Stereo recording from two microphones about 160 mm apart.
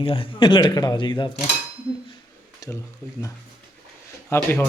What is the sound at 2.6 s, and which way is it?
Speech, 20° left (ahead or behind).